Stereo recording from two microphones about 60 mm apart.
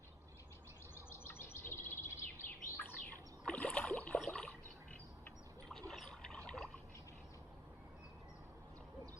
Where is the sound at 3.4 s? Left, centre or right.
Centre.